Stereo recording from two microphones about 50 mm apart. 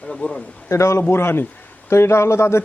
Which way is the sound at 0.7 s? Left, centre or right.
Left.